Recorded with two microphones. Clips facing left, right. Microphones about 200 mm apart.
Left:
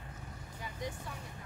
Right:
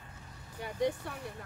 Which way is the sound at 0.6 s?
60° right (ahead or behind).